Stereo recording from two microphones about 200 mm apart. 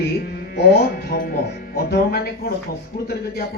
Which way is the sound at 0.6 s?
50° left (ahead or behind).